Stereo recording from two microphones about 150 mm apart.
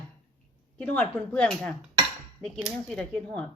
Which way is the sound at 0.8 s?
10° left (ahead or behind).